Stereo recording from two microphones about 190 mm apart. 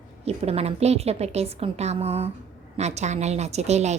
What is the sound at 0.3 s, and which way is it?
Speech, 35° right (ahead or behind).